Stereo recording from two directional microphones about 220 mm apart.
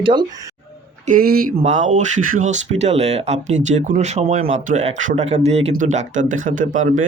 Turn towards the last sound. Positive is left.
turn(degrees=-35)  # may be behind; listen again after turning